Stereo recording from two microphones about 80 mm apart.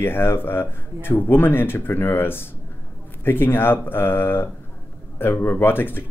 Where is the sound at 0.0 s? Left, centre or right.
Left.